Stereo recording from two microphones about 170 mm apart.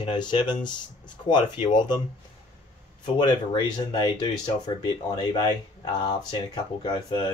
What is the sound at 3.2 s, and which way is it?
Speech, 25° left (ahead or behind).